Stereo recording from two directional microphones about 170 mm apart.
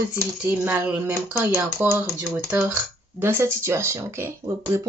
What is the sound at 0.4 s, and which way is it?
Speech, 10° right (ahead or behind).